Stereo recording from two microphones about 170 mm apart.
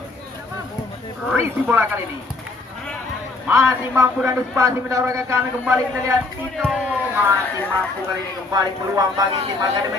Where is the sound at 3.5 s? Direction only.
15° right (ahead or behind).